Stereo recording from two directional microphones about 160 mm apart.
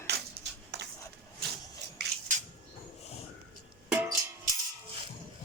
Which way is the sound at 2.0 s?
90° right.